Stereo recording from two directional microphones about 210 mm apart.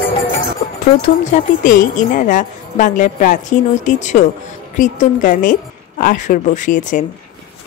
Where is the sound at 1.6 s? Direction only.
40° left (ahead or behind).